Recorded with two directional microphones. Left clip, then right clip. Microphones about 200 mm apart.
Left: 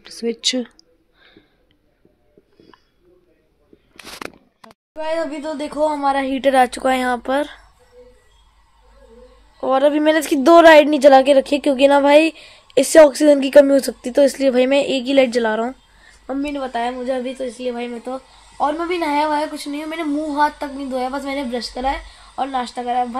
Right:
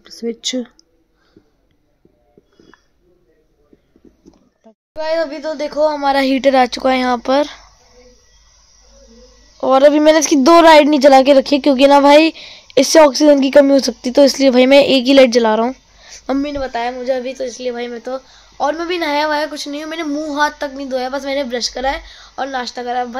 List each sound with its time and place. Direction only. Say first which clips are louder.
0.0 s speech: left 1 dB; 10° right (ahead or behind)
4.9 s speech: right 4 dB; centre (ahead or behind)
6.4 s a woman's voice: even; 15° right (ahead or behind)
9.6 s a woman's voice: right 6 dB; 25° right (ahead or behind)
16.5 s speech: right 2 dB; 5° right (ahead or behind)